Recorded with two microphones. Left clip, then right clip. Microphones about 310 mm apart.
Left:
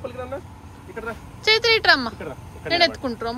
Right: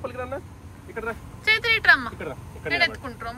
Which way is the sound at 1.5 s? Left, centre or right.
Centre.